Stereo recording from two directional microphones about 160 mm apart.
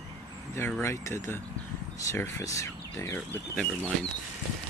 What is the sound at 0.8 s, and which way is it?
Speech, 15° left (ahead or behind).